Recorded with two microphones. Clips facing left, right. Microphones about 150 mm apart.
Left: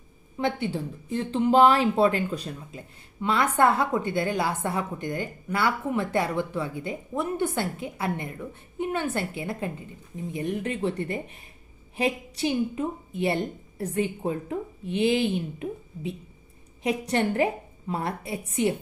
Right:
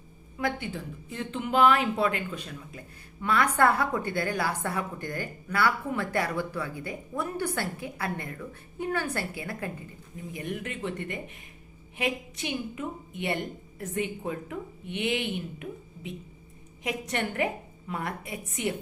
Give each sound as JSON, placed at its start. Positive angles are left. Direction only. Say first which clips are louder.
{"t": 0.3, "sound": "a woman's voice", "louder": "left 4 dB", "side_deg": 30}
{"t": 2.7, "sound": "a woman's voice", "louder": "left 4 dB", "side_deg": 20}
{"t": 16.8, "sound": "a woman's voice", "louder": "left 6 dB", "side_deg": 30}